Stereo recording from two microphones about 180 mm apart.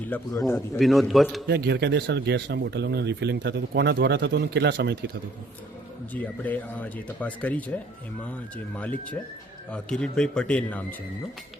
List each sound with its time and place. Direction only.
0.1 s speech: 15° left (ahead or behind)
0.8 s a man's voice: centre (ahead or behind)
1.5 s speech: 65° right (ahead or behind)
6.1 s a man's voice: 10° left (ahead or behind)